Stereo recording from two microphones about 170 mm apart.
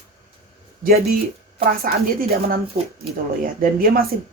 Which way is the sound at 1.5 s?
60° right (ahead or behind).